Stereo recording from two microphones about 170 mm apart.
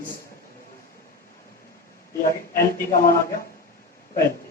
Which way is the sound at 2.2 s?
60° left (ahead or behind).